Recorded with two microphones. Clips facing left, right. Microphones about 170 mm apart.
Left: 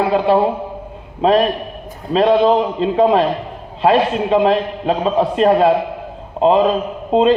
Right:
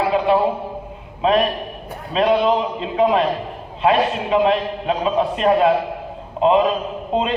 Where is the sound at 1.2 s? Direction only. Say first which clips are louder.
Left 4 dB; 35° left (ahead or behind).